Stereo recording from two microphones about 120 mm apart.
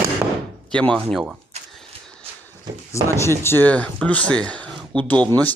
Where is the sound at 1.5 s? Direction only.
65° right (ahead or behind).